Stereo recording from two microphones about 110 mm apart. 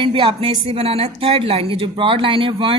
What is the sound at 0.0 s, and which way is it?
Speech, 50° right (ahead or behind).